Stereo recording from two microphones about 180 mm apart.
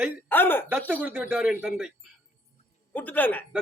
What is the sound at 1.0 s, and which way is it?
Speech, 5° right (ahead or behind).